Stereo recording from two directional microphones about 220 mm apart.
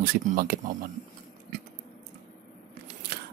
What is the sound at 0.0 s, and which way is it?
Speech, 40° right (ahead or behind).